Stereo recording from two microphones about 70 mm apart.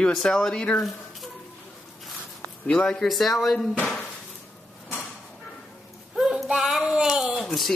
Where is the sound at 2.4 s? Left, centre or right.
Left.